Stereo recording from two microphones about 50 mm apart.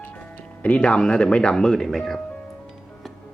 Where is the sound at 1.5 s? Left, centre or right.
Centre.